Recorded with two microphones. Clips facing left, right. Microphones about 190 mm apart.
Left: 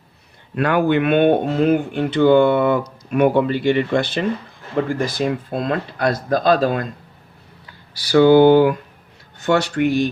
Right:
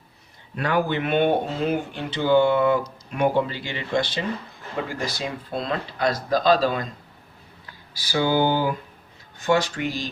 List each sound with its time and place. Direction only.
0.5 s speech: 60° left (ahead or behind)
8.1 s speech: 60° left (ahead or behind)